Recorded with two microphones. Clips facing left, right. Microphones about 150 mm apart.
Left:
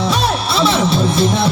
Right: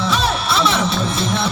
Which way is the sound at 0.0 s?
35° left (ahead or behind).